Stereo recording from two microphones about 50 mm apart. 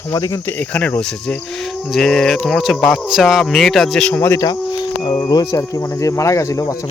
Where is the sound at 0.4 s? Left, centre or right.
Left.